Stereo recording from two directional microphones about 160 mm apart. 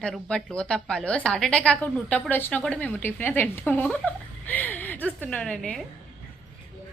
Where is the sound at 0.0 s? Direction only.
5° left (ahead or behind).